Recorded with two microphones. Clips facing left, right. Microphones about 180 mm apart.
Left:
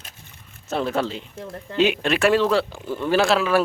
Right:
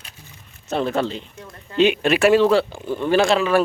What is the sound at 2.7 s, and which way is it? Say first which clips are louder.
Speech: right 3 dB; 20° right (ahead or behind).